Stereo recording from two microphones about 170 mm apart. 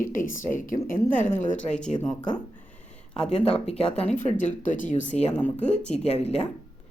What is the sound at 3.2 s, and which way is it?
Speech, 35° left (ahead or behind).